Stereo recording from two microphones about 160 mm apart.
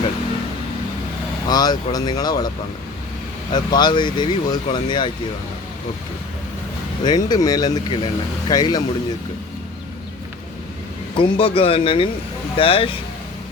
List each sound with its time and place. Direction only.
1.5 s speech: 25° left (ahead or behind)
3.5 s speech: 25° left (ahead or behind)
7.0 s speech: 25° left (ahead or behind)
11.2 s speech: 35° left (ahead or behind)